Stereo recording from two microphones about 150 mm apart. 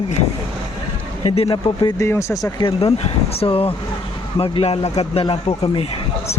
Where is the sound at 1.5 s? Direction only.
20° left (ahead or behind).